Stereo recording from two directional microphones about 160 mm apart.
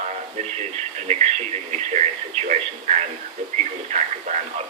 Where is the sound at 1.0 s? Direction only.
45° right (ahead or behind).